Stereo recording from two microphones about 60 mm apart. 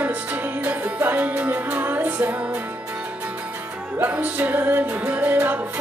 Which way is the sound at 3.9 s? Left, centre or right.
Right.